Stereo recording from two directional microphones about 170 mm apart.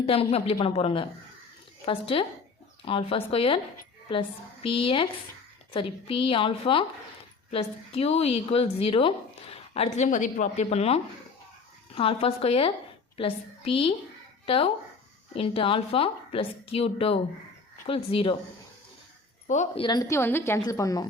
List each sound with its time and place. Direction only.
0.0 s a woman's voice: 35° left (ahead or behind)
19.5 s speech: 45° left (ahead or behind)
19.8 s a woman's voice: 25° left (ahead or behind)